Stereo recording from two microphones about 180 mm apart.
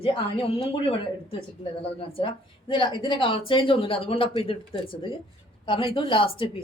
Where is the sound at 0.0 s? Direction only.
30° left (ahead or behind).